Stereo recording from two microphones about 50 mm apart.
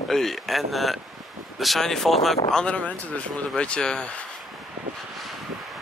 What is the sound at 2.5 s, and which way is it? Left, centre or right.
Speech, left.